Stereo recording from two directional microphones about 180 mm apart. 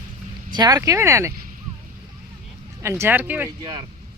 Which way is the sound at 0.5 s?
20° right (ahead or behind).